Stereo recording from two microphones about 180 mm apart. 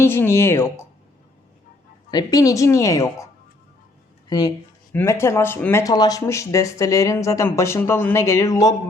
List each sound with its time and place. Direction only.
0.0 s speech: 15° left (ahead or behind)
2.0 s speech: 20° left (ahead or behind)
4.3 s speech: 20° left (ahead or behind)